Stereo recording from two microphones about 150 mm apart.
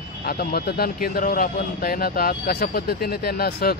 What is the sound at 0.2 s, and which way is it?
A man's voice, 90° left.